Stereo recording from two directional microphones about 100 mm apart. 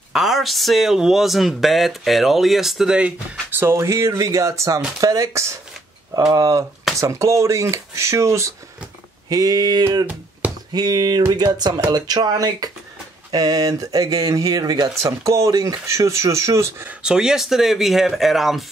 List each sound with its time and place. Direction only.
0.1 s speech: 5° right (ahead or behind)
3.5 s speech: 25° right (ahead or behind)
9.3 s speech: 40° right (ahead or behind)
15.0 s speech: 30° right (ahead or behind)
16.8 s speech: 10° right (ahead or behind)